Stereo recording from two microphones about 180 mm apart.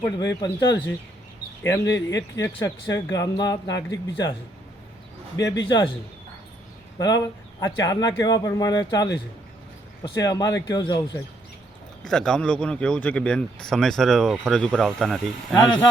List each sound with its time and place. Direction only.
0.0 s speech: 20° left (ahead or behind)
5.4 s speech: 20° left (ahead or behind)
7.0 s speech: 20° left (ahead or behind)
12.0 s speech: 5° left (ahead or behind)